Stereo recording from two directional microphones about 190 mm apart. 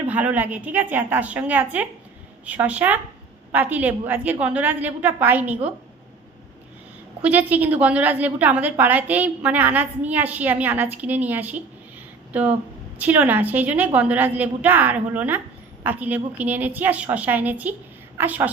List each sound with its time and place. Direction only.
0.0 s a woman's voice: 10° right (ahead or behind)
7.2 s a woman's voice: 10° right (ahead or behind)